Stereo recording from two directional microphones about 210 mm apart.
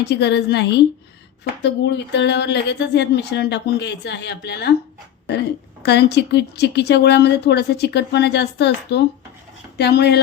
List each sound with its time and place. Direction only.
0.0 s speech: 55° left (ahead or behind)
5.8 s speech: 50° left (ahead or behind)